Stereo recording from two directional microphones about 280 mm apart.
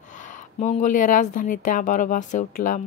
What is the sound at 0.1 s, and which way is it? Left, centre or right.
Speech, left.